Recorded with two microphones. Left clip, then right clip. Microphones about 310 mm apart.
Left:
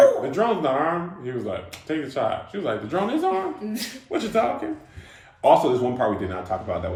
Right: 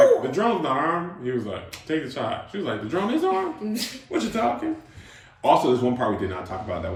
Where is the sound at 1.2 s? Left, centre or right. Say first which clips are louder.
Even; centre.